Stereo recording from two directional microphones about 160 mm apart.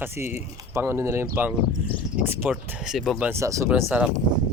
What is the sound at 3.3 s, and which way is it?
Speech, 20° right (ahead or behind).